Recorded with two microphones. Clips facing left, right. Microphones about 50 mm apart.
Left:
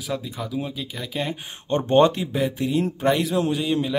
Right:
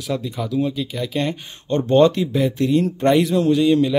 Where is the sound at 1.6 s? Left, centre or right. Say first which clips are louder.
Right 3 dB; left.